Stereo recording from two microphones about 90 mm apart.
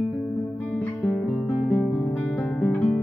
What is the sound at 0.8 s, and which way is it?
Music, 10° left (ahead or behind).